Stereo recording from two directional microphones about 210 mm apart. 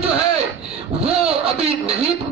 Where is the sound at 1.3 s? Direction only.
30° right (ahead or behind).